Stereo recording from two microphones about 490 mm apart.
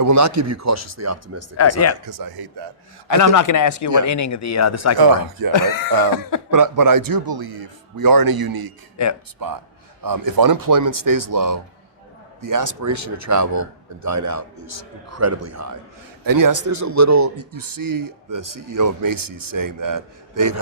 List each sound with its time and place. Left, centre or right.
0.0 s a man's voice: right
2.0 s speech: right
3.3 s speech: left
4.9 s speech: right
5.5 s speech: left
6.5 s speech: right
9.0 s speech: left
9.4 s a man's voice: right